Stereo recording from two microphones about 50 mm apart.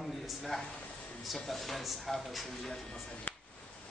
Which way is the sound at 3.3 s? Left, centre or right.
Left.